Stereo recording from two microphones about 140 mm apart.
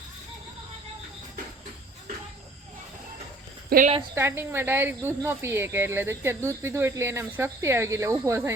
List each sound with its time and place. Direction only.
3.7 s speech: 90° right
4.1 s speech: 15° right (ahead or behind)